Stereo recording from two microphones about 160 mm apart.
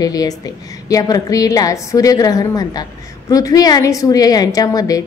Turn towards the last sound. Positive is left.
turn(degrees=25)  # may be behind; listen again after turning